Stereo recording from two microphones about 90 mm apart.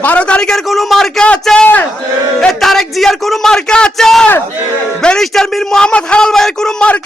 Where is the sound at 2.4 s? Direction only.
5° left (ahead or behind).